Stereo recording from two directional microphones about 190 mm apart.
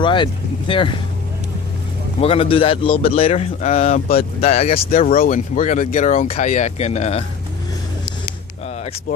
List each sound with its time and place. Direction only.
0.0 s speech: 25° left (ahead or behind)
2.2 s speech: 30° left (ahead or behind)
4.9 s speech: 45° left (ahead or behind)